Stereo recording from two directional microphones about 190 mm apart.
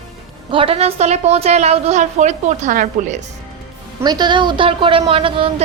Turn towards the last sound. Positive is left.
turn(degrees=-30)  # may be behind; listen again after turning